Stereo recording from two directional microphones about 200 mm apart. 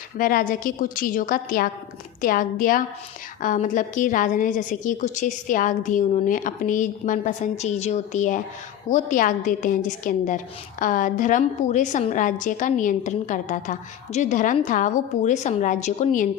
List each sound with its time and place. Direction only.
0.2 s a woman's voice: 45° left (ahead or behind)